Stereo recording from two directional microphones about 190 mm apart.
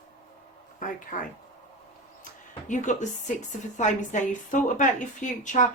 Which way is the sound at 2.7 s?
40° left (ahead or behind).